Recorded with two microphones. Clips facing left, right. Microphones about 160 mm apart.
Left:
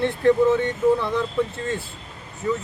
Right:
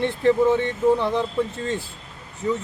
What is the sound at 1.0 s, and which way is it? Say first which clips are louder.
Speech: right 2 dB; 25° right (ahead or behind).